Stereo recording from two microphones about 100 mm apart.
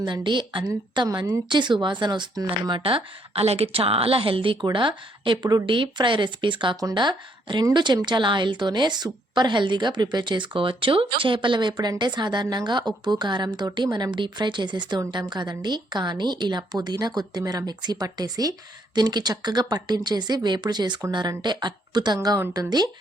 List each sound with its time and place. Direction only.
0.0 s a woman's voice: 50° right (ahead or behind)
2.7 s a woman's voice: 65° right (ahead or behind); by 5.7 s 45° right (ahead or behind)
5.7 s a woman's voice: 55° right (ahead or behind)